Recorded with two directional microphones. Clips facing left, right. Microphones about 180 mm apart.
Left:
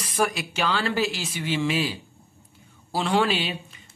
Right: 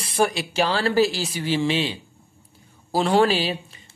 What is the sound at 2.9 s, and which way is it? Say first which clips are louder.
Speech: right 4 dB; 40° right (ahead or behind).